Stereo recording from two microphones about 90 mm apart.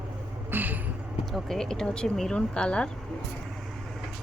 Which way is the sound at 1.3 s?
5° left (ahead or behind).